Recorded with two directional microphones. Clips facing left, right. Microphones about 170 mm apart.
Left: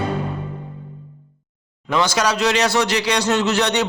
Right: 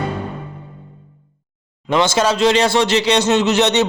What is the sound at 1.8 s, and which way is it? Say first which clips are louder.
Speech: right 3 dB; 25° right (ahead or behind).